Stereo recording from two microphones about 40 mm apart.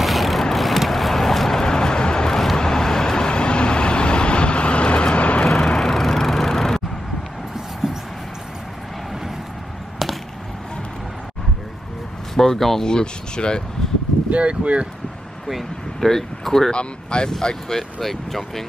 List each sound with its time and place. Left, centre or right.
0.0 s vehicle: centre
1.6 s vehicle: centre; by 5.4 s left
5.8 s vehicle: centre
7.5 s a sound: centre
12.4 s speech: centre
12.8 s speech: left
14.3 s speech: right
16.0 s speech: centre
16.7 s speech: left; by 18.6 s centre